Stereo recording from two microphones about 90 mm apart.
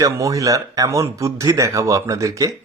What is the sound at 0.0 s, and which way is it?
Speech, 35° right (ahead or behind).